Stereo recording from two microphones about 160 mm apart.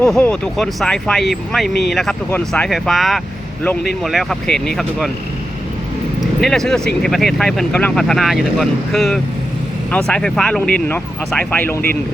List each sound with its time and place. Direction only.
0.0 s speech: 5° left (ahead or behind)
6.4 s speech: 5° left (ahead or behind)